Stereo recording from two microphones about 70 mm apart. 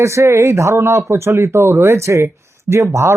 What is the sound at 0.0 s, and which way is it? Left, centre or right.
Speech, right.